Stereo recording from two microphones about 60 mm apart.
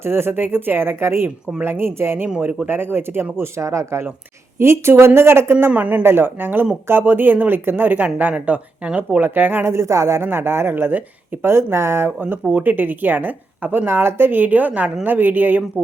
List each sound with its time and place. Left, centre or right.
0.0 s a woman's voice: right
3.6 s speech: right
5.7 s speech: right
6.1 s a woman's voice: right
9.6 s speech: right
10.2 s a woman's voice: right
11.4 s speech: right
12.5 s a woman's voice: right